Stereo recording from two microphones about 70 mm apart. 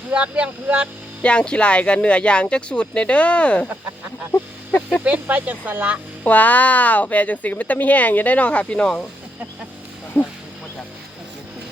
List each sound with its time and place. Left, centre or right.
0.1 s speech: centre
1.2 s speech: centre
5.0 s speech: right
6.2 s speech: left
10.2 s a sound: left